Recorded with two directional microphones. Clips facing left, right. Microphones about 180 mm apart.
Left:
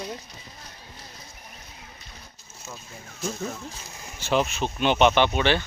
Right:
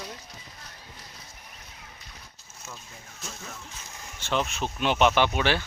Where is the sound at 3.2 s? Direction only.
40° left (ahead or behind).